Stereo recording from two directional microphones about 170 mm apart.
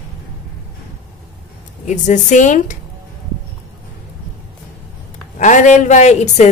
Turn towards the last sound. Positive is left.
turn(degrees=40)  # may be behind; listen again after turning